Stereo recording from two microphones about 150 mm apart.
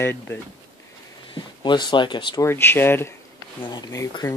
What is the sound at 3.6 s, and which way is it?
Speech, 30° left (ahead or behind).